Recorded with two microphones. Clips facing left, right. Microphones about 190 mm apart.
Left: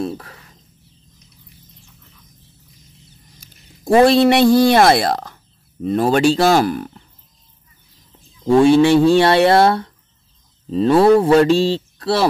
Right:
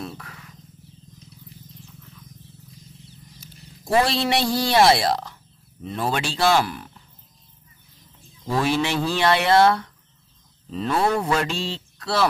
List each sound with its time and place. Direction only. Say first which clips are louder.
0.0 s a sound: left 10 dB; 30° left (ahead or behind)
3.3 s speech: right 3 dB; 50° left (ahead or behind)
8.5 s speech: left 12 dB; 30° left (ahead or behind)